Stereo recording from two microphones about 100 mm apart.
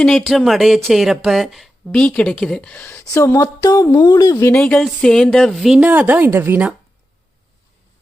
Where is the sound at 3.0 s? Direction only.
30° left (ahead or behind).